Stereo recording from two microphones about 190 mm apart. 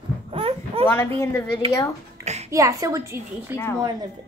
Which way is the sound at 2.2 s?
35° right (ahead or behind).